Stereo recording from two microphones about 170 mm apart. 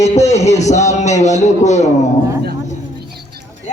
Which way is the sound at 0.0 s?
40° left (ahead or behind).